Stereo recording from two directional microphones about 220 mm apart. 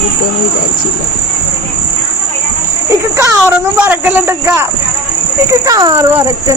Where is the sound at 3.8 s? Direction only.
10° right (ahead or behind).